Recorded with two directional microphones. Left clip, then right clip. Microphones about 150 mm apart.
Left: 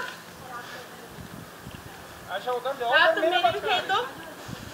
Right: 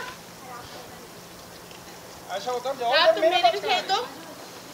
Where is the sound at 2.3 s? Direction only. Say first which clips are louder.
Even; 90° right.